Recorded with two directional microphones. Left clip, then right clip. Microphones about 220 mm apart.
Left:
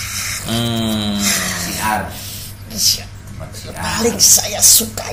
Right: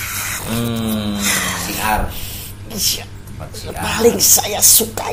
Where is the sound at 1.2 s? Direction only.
40° right (ahead or behind).